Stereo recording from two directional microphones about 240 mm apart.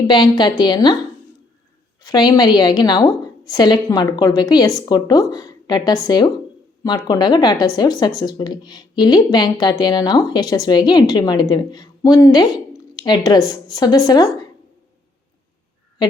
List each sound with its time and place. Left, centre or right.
0.1 s speech: centre
2.0 s a woman's voice: centre